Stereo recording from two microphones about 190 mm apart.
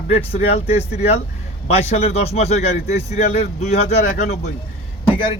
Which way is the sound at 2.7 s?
55° left (ahead or behind).